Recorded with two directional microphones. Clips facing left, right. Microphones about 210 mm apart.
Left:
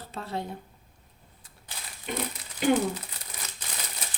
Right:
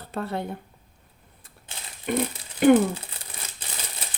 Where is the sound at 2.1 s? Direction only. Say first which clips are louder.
Right 8 dB; 55° right (ahead or behind).